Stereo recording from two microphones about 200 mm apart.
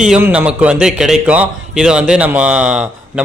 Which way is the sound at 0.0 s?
5° right (ahead or behind).